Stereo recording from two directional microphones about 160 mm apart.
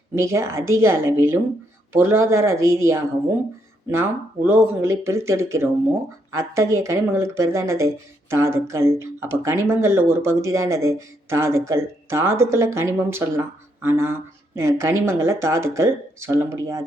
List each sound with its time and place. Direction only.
0.1 s speech: 15° right (ahead or behind)
4.4 s speech: 15° right (ahead or behind)